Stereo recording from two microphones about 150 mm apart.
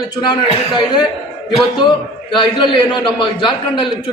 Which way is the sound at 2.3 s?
30° left (ahead or behind).